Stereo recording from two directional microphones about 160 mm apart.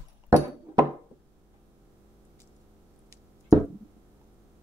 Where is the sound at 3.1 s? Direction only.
20° right (ahead or behind).